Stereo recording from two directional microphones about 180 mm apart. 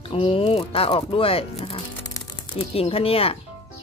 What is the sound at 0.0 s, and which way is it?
Speech, 30° left (ahead or behind).